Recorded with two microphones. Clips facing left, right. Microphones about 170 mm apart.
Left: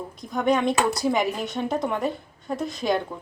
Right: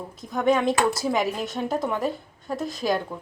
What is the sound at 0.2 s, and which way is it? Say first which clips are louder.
A woman's voice: right 1 dB; centre (ahead or behind).